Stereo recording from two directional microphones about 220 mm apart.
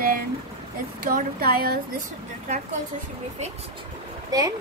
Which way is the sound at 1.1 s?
45° right (ahead or behind).